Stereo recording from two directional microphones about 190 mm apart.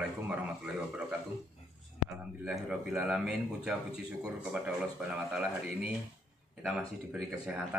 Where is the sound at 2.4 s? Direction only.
5° right (ahead or behind).